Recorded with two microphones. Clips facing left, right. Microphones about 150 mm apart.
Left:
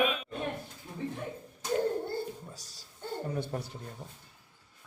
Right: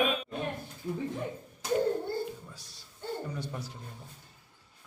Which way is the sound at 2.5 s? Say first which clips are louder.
Left 2 dB; 40° left (ahead or behind).